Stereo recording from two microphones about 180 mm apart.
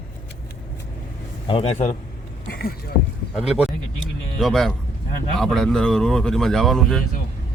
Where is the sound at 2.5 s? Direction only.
60° left (ahead or behind).